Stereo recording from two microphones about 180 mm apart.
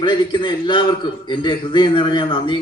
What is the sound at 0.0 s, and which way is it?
Speech, 25° left (ahead or behind).